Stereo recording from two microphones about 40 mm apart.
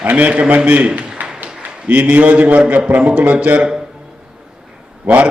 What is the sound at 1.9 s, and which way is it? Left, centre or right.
A man's voice, right.